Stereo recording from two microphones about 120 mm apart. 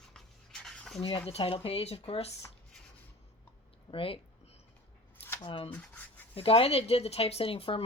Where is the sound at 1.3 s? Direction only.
50° left (ahead or behind).